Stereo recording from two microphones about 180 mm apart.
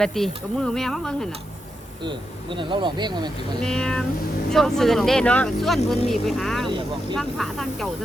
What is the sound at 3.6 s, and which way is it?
Speech, 5° left (ahead or behind).